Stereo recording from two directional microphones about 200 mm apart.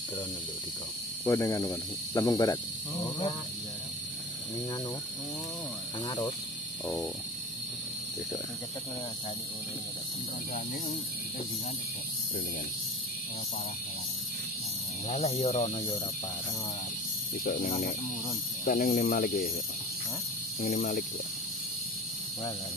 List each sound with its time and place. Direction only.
1.2 s speech: 15° left (ahead or behind)
6.0 s speech: 20° left (ahead or behind)
15.0 s speech: 30° left (ahead or behind)
17.5 s speech: 45° left (ahead or behind)
20.6 s speech: 45° left (ahead or behind)